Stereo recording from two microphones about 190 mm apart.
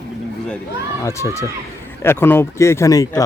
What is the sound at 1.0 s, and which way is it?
Speech, 15° left (ahead or behind).